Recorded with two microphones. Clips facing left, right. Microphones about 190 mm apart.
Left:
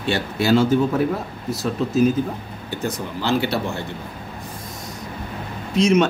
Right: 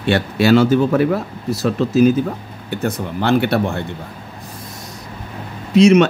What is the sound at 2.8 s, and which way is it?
Speech, 55° right (ahead or behind).